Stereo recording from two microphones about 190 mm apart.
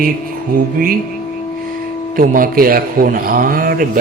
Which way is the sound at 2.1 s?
50° right (ahead or behind).